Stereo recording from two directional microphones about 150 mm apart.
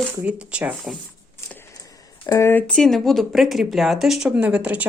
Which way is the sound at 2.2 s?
15° left (ahead or behind).